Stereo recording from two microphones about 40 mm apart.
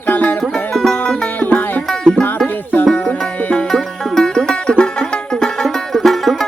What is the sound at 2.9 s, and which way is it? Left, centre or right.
Music, left.